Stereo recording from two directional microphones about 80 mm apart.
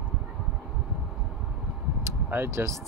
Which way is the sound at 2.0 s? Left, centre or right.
Right.